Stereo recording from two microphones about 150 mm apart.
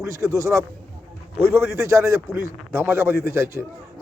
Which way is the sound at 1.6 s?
20° right (ahead or behind).